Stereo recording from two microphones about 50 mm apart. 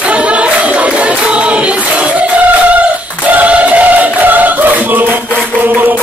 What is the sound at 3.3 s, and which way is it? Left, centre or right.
Choir, right.